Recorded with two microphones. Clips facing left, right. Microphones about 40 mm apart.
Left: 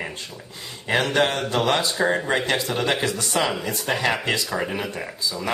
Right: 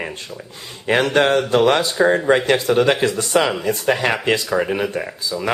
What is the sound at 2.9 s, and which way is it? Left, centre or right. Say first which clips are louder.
Speech: right 7 dB; right.